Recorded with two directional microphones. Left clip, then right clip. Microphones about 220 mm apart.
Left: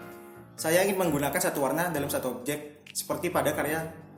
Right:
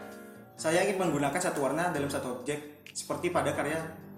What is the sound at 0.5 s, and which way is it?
Speech, 45° left (ahead or behind).